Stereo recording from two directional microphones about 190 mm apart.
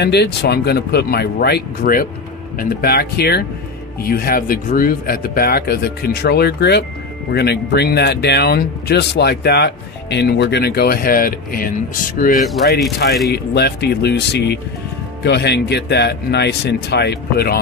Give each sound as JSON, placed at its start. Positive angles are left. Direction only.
{"t": 0.0, "sound": "speech", "side_deg": 60}
{"t": 13.3, "sound": "speech", "side_deg": 60}